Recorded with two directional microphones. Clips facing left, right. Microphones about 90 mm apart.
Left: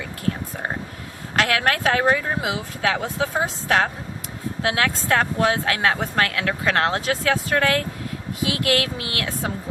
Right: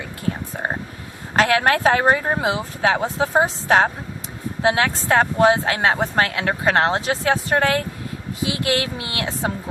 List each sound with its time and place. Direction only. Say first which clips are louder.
1.5 s speech: right 5 dB; 30° right (ahead or behind)
2.4 s speech: right 4 dB; 30° right (ahead or behind)